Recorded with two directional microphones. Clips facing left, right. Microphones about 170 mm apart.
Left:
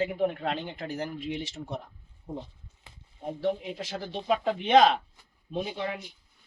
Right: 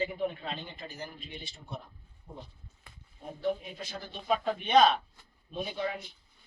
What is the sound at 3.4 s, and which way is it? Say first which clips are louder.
Speech: left 2 dB; 85° left.